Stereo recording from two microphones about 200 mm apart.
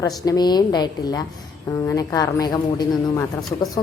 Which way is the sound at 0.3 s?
20° left (ahead or behind).